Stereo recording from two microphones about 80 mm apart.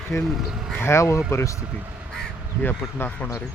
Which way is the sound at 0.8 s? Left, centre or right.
Left.